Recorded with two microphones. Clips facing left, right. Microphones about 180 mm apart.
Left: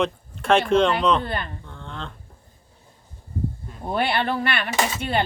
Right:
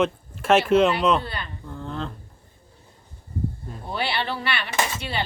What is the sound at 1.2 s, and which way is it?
Speech, 50° left (ahead or behind).